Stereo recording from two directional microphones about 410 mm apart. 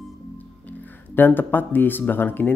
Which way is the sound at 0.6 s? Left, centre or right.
Centre.